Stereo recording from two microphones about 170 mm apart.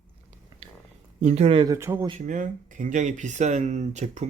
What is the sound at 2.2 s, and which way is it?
Speech, 50° right (ahead or behind).